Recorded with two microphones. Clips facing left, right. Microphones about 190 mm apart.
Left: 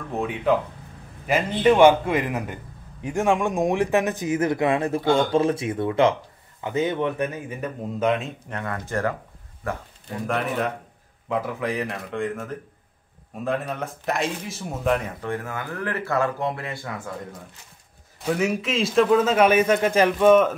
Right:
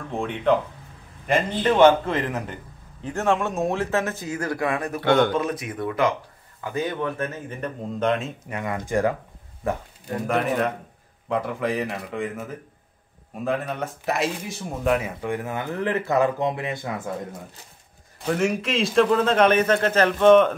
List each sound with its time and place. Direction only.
0.1 s a man's voice: 5° left (ahead or behind); by 5.0 s 25° left (ahead or behind)
5.0 s speech: 65° right (ahead or behind)
5.3 s a man's voice: 30° left (ahead or behind); by 9.1 s 15° right (ahead or behind)
10.2 s a man's voice: centre (ahead or behind); by 17.1 s 20° right (ahead or behind)
18.2 s a man's voice: centre (ahead or behind)